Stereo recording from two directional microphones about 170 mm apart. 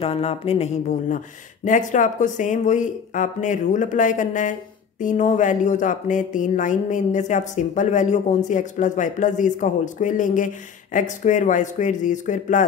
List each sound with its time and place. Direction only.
0.0 s speech: 35° left (ahead or behind)